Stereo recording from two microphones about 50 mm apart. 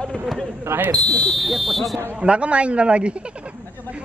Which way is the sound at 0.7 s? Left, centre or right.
Right.